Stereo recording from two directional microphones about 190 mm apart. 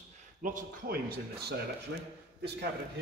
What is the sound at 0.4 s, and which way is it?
Speech, 45° right (ahead or behind).